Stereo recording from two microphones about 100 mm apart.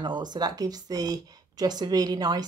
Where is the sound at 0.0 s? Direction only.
45° right (ahead or behind).